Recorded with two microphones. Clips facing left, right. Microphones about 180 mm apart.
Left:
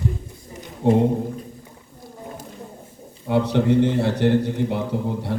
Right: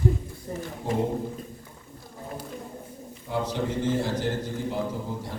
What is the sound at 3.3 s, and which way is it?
A man's voice, 65° left (ahead or behind).